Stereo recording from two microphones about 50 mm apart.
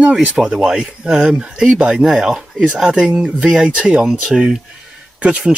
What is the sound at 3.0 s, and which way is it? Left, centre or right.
Speech, centre.